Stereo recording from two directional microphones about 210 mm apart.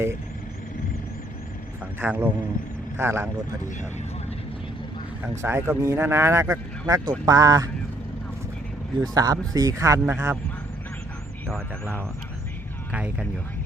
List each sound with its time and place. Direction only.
2.0 s speech: 10° right (ahead or behind)
5.4 s speech: 10° right (ahead or behind)
9.0 s speech: 15° right (ahead or behind)
12.9 s speech: 5° right (ahead or behind)